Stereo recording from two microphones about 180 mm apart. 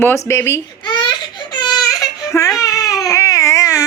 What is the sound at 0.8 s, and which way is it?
Baby cry, 25° left (ahead or behind).